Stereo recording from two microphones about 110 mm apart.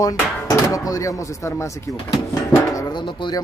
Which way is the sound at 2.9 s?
45° left (ahead or behind).